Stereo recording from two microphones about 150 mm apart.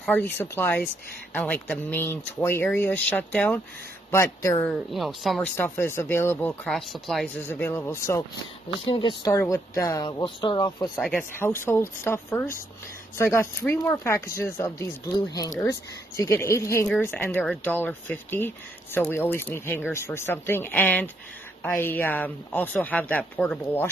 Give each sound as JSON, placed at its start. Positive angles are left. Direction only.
{"t": 0.0, "sound": "speech", "side_deg": 15}
{"t": 4.1, "sound": "speech", "side_deg": 20}
{"t": 4.6, "sound": "speech", "side_deg": 0}
{"t": 5.6, "sound": "speech", "side_deg": 15}
{"t": 6.6, "sound": "speech", "side_deg": 0}
{"t": 8.8, "sound": "speech", "side_deg": 35}
{"t": 9.3, "sound": "speech", "side_deg": 20}
{"t": 11.0, "sound": "speech", "side_deg": 5}
{"t": 11.3, "sound": "speech", "side_deg": 15}